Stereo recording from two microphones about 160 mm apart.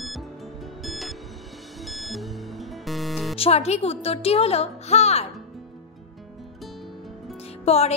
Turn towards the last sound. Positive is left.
turn(degrees=40)  # may be behind; listen again after turning